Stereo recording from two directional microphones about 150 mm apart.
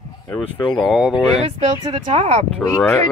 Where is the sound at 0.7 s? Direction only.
Centre (ahead or behind).